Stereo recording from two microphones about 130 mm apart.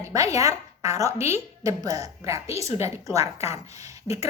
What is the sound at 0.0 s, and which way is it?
A woman's voice, 25° right (ahead or behind).